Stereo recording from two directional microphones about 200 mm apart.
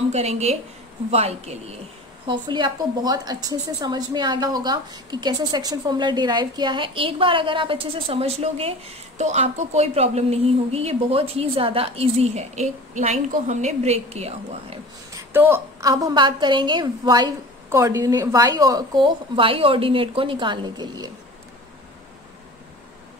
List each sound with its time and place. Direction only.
0.1 s a woman's voice: 30° right (ahead or behind)
15.1 s a woman's voice: 10° right (ahead or behind)